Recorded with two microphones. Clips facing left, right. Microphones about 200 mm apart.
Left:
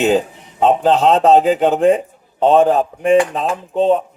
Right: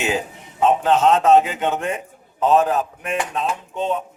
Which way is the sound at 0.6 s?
35° left (ahead or behind).